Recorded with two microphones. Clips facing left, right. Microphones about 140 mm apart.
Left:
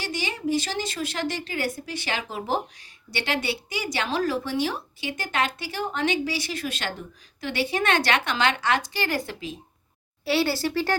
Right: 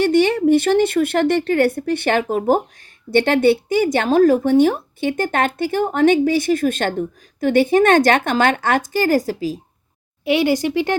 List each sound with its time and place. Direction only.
0.0 s a woman's voice: 60° right (ahead or behind); by 9.6 s 40° right (ahead or behind)
10.2 s speech: 15° right (ahead or behind)